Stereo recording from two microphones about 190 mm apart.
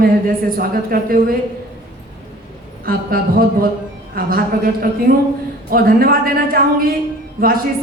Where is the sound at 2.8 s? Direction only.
50° right (ahead or behind).